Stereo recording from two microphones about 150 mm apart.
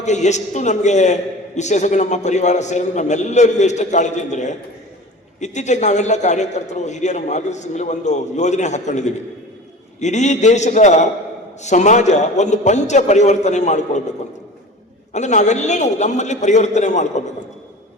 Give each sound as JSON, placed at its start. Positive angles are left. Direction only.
{"t": 0.0, "sound": "a man's voice", "side_deg": 50}
{"t": 15.1, "sound": "a man's voice", "side_deg": 50}